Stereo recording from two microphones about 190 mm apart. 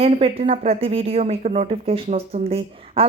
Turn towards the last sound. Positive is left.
turn(degrees=-30)  # may be behind; listen again after turning